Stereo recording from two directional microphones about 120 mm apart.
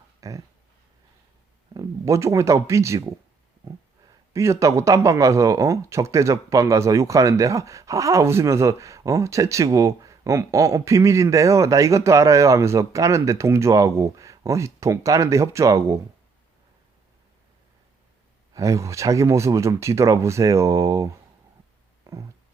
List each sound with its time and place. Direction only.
0.2 s speech: 25° right (ahead or behind)
1.7 s speech: 30° right (ahead or behind)
4.3 s speech: 25° right (ahead or behind)
18.5 s speech: 25° right (ahead or behind)
22.1 s a sound: 25° right (ahead or behind)